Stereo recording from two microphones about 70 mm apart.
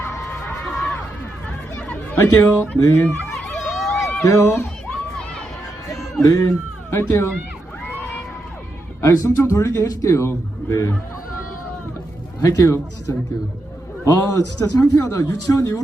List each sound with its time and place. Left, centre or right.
0.6 s a sound: centre
2.1 s speech: left
3.6 s a sound: centre
4.2 s speech: left
6.2 s a man's voice: left
9.0 s a man's voice: left
12.4 s a man's voice: left